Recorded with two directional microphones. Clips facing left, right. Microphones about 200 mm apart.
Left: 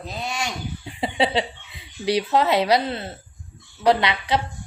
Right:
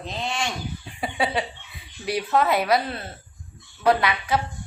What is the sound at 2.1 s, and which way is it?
Speech, 25° left (ahead or behind).